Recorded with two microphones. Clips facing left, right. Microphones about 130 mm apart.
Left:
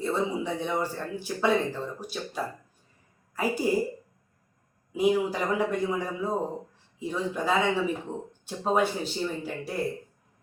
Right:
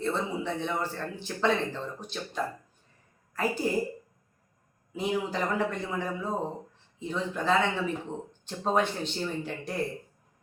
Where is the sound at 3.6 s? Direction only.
10° left (ahead or behind).